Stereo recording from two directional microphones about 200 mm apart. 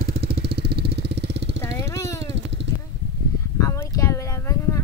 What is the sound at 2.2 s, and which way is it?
Vehicle, 65° right (ahead or behind).